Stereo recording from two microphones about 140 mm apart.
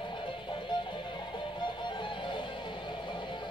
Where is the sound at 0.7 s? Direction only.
35° left (ahead or behind).